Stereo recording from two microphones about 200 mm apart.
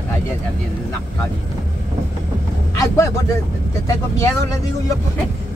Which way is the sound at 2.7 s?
15° left (ahead or behind).